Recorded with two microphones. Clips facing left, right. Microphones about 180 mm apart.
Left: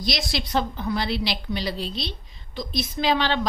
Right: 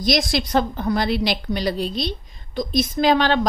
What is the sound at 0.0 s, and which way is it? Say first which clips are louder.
A woman's voice: right 7 dB; 45° right (ahead or behind).